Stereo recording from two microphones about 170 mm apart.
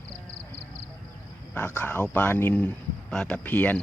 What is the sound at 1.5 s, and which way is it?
Speech, 10° left (ahead or behind).